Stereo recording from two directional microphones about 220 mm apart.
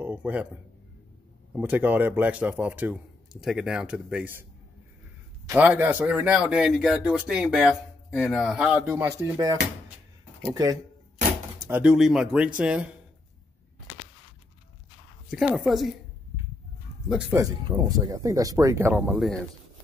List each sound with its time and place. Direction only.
0.0 s a man's voice: 5° right (ahead or behind)
1.5 s a man's voice: 5° right (ahead or behind)
5.5 s a man's voice: 10° right (ahead or behind)
15.3 s speech: centre (ahead or behind)
17.1 s a man's voice: 10° right (ahead or behind)